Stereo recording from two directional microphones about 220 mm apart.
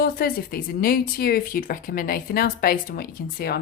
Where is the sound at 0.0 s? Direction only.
45° left (ahead or behind).